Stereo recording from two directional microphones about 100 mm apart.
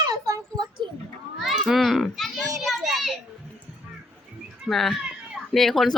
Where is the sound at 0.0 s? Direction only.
35° right (ahead or behind).